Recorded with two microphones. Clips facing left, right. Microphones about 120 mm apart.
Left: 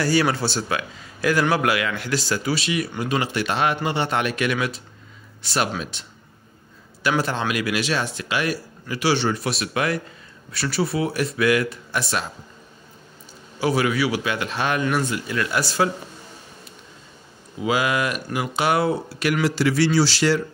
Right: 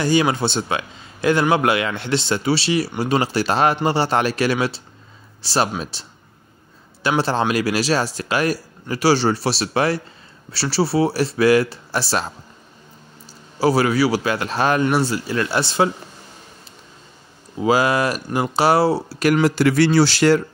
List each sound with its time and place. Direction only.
0.0 s speech: 20° right (ahead or behind)
13.6 s speech: 35° right (ahead or behind)
17.6 s speech: 35° right (ahead or behind)
19.4 s speech: 50° right (ahead or behind)